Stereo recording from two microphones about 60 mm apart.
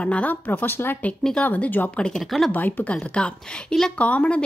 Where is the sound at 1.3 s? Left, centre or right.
Left.